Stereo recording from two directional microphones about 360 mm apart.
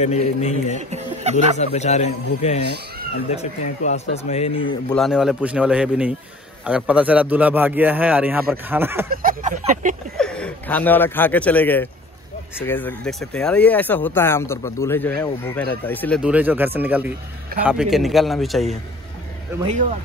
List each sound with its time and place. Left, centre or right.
0.0 s speech: centre
0.7 s a sound: centre
1.6 s speech: centre
4.9 s speech: centre
9.1 s speech: right
10.1 s speech: centre